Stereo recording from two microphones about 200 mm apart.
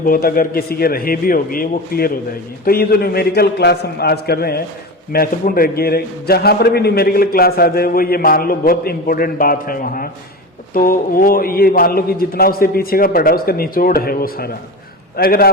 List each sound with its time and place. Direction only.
0.0 s a man's voice: 45° left (ahead or behind)